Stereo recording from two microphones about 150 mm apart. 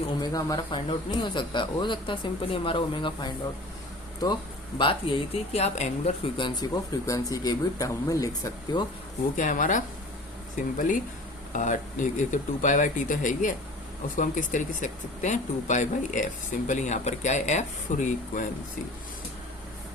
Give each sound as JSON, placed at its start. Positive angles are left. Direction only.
{"t": 0.2, "sound": "speech", "side_deg": 25}
{"t": 4.8, "sound": "speech", "side_deg": 35}
{"t": 6.3, "sound": "speech", "side_deg": 30}
{"t": 9.3, "sound": "speech", "side_deg": 60}